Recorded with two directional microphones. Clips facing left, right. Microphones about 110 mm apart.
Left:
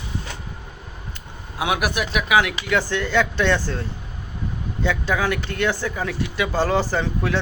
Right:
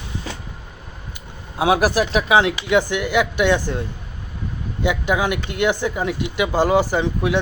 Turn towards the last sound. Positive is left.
turn(degrees=-15)  # may be behind; listen again after turning